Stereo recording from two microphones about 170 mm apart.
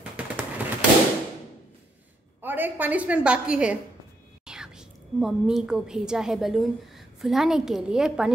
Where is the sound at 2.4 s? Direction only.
10° right (ahead or behind).